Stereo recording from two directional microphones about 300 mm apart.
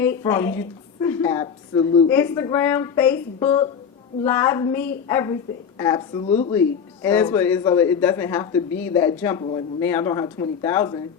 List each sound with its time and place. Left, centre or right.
0.0 s speech: centre
6.5 s speech: centre